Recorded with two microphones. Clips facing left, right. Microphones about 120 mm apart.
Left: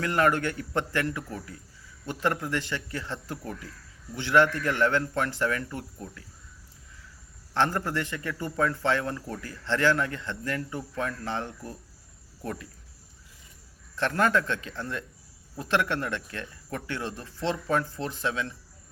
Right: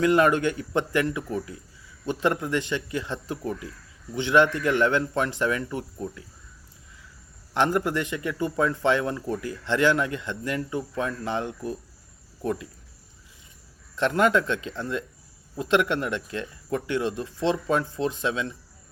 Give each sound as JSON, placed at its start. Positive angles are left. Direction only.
{"t": 0.0, "sound": "a man's voice", "side_deg": -15}
{"t": 7.5, "sound": "a man's voice", "side_deg": -15}
{"t": 13.9, "sound": "a man's voice", "side_deg": -20}